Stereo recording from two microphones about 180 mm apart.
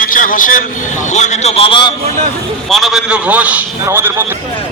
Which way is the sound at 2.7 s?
Centre (ahead or behind).